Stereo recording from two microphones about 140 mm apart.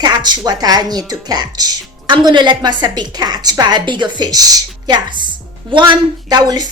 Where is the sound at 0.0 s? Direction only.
30° right (ahead or behind).